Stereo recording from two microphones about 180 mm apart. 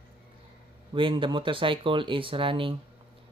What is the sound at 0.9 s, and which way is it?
Speech, 30° right (ahead or behind).